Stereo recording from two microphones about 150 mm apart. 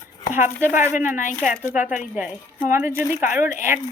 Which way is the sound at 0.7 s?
50° left (ahead or behind).